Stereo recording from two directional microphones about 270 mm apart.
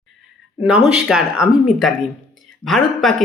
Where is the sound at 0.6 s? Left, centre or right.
Centre.